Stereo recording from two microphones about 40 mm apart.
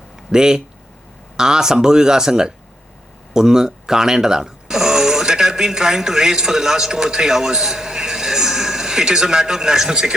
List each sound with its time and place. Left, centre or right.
0.3 s speech: centre